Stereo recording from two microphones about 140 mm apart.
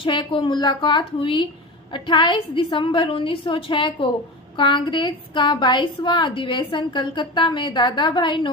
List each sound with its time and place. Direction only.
0.0 s a woman's voice: 35° left (ahead or behind)